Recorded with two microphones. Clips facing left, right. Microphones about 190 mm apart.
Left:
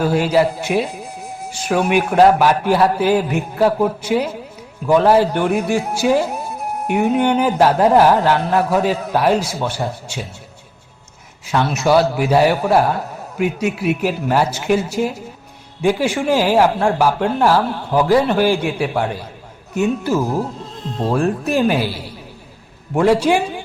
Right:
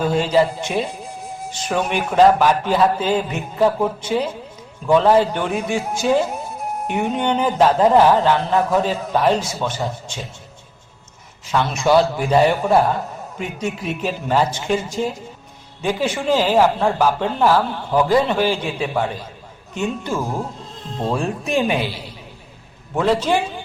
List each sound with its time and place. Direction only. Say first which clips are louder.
0.0 s speech: left 2 dB; 10° left (ahead or behind)
6.3 s music: left 2 dB; 65° left (ahead or behind)
6.8 s speech: left 5 dB; 10° left (ahead or behind)
11.4 s speech: left 1 dB; 5° left (ahead or behind)